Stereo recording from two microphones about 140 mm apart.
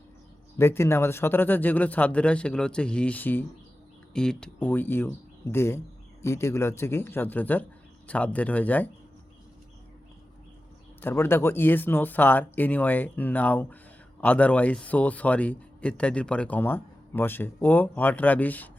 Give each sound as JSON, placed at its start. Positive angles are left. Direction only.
{"t": 0.6, "sound": "speech", "side_deg": 20}
{"t": 11.0, "sound": "speech", "side_deg": 15}